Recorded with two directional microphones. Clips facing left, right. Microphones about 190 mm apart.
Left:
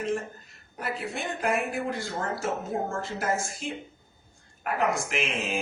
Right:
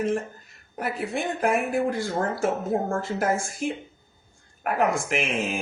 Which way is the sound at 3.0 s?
55° right (ahead or behind).